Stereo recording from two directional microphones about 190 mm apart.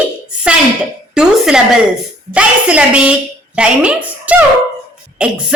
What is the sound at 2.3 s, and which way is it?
A woman's voice, 5° right (ahead or behind).